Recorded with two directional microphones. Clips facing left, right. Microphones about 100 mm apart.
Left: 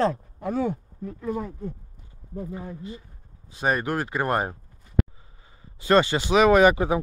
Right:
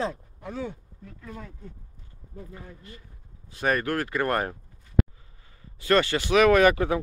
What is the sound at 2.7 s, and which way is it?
Speech, 20° left (ahead or behind).